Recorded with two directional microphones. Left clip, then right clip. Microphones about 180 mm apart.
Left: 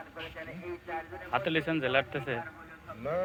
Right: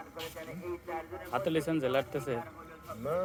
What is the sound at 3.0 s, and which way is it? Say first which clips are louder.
Speech: left 1 dB; 35° right (ahead or behind).